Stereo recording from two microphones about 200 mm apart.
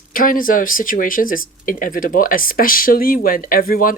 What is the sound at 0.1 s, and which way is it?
Speech, 45° left (ahead or behind).